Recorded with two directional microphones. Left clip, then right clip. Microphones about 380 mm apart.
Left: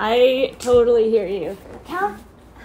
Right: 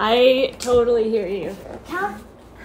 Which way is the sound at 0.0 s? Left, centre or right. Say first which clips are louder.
Right 1 dB; centre.